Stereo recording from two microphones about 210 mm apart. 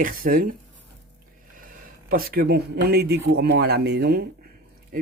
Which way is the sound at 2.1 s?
45° right (ahead or behind).